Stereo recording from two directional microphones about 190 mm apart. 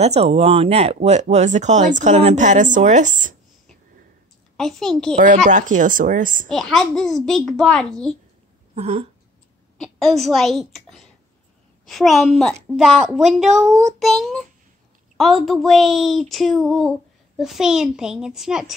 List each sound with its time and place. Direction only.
0.0 s speech: 35° right (ahead or behind)
4.6 s speech: centre (ahead or behind)
5.2 s speech: 40° right (ahead or behind)
6.5 s speech: centre (ahead or behind)
8.7 s a sound: 35° right (ahead or behind)
9.8 s speech: centre (ahead or behind)